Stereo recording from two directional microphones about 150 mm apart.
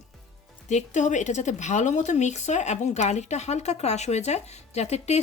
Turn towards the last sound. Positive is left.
turn(degrees=45)  # may be behind; listen again after turning